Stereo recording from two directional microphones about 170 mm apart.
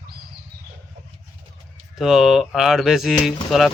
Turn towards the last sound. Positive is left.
turn(degrees=0)  # may be behind; listen again after turning